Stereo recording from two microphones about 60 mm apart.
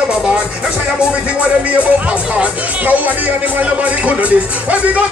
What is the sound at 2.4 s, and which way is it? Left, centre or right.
Speech, right.